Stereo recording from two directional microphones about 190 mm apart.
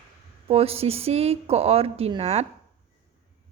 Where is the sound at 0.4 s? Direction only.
30° right (ahead or behind).